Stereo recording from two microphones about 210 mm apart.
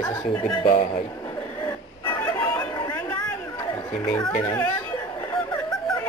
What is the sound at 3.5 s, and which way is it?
Music, 15° left (ahead or behind).